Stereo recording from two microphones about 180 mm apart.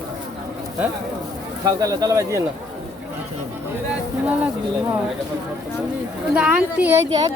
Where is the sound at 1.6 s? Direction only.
20° right (ahead or behind).